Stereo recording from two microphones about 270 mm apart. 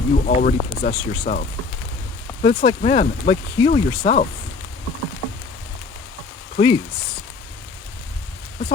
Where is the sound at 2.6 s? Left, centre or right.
Left.